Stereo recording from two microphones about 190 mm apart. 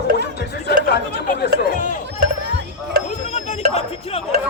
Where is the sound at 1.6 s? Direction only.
45° left (ahead or behind).